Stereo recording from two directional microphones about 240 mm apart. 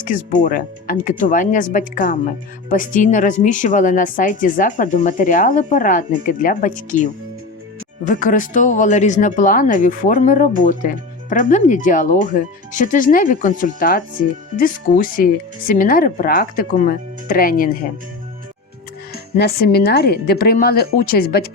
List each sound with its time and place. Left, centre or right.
0.0 s speech: left
19.4 s speech: left